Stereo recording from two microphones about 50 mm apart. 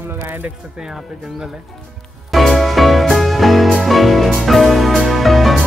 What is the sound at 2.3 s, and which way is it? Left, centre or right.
Music, centre.